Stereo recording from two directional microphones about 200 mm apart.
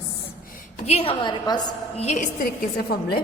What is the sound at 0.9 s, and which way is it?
Speech, 30° left (ahead or behind).